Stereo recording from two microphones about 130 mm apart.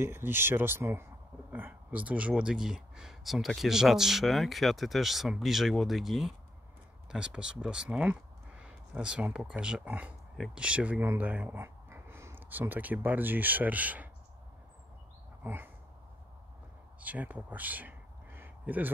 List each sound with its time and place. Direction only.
0.0 s speech: 20° right (ahead or behind)
15.4 s a sound: 15° right (ahead or behind)
17.0 s a man's voice: 10° right (ahead or behind)